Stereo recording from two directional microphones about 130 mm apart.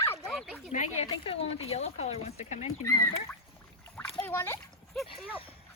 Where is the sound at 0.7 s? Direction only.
65° left (ahead or behind).